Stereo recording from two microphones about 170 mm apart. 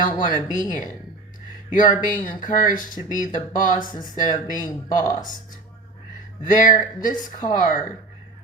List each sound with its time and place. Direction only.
0.0 s speech: 55° left (ahead or behind)
3.9 s speech: 25° left (ahead or behind)
4.2 s speech: 50° left (ahead or behind)
6.4 s speech: 50° left (ahead or behind)